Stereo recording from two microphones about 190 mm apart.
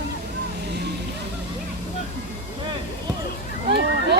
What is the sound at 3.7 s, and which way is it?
Speech, 60° right (ahead or behind).